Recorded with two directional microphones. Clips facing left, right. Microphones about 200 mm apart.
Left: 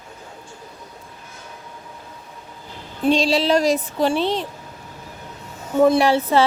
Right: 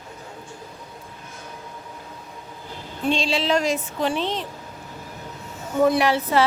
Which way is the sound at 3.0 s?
40° left (ahead or behind).